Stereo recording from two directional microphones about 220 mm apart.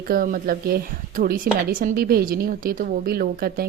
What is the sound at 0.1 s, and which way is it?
A woman's voice, 40° right (ahead or behind).